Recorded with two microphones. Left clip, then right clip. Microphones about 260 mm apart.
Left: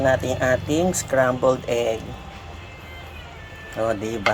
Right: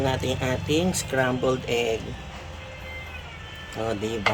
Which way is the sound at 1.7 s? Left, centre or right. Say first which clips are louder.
Left 2 dB; left.